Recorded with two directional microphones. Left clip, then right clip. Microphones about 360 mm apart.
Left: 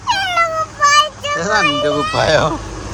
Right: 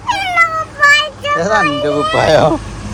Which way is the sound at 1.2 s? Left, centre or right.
Centre.